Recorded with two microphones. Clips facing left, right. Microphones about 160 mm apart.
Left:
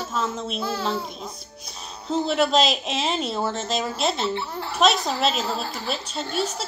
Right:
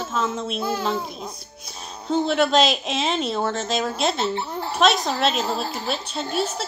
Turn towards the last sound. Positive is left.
turn(degrees=0)  # may be behind; listen again after turning